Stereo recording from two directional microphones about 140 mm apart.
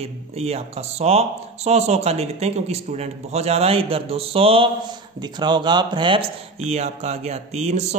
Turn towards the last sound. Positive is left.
turn(degrees=-50)  # may be behind; listen again after turning